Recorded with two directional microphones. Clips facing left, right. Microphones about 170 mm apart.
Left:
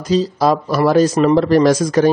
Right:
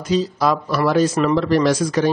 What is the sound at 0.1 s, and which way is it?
A man's voice, 35° left (ahead or behind).